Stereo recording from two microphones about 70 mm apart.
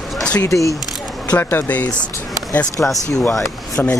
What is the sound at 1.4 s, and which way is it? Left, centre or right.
Speech, left.